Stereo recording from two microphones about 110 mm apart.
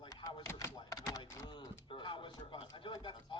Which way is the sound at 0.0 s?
40° left (ahead or behind).